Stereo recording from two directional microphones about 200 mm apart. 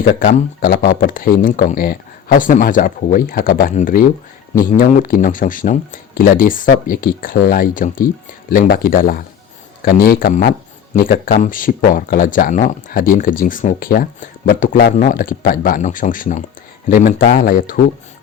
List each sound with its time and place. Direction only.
0.0 s speech: 45° left (ahead or behind)